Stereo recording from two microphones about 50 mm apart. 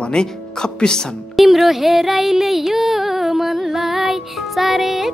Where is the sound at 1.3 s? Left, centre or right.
Centre.